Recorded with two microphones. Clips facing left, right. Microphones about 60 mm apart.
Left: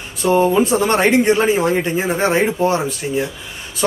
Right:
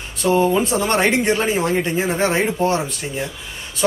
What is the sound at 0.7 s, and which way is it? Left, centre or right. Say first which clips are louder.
A man's voice: left 3 dB; left.